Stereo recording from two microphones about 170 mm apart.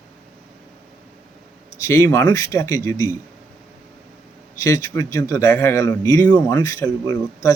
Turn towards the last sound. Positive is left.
turn(degrees=20)  # may be behind; listen again after turning